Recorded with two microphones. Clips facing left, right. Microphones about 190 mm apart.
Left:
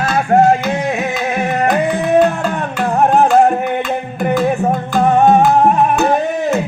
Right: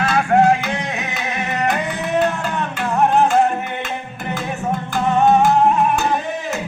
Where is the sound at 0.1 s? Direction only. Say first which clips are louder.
Left 4 dB; 45° left (ahead or behind).